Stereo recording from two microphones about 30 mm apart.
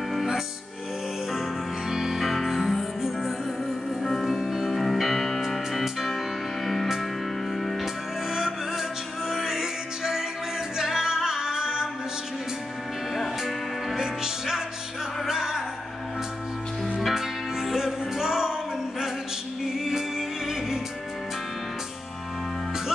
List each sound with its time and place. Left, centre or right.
1.3 s music: centre
4.2 s music: centre
6.6 s music: centre
7.8 s music: centre
13.9 s music: centre
17.1 s music: centre
19.6 s music: centre